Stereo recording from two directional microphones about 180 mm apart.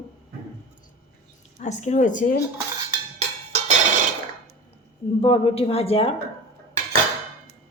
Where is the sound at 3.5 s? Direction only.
40° right (ahead or behind).